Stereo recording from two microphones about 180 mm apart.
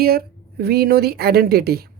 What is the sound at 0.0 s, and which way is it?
Speech, 55° right (ahead or behind).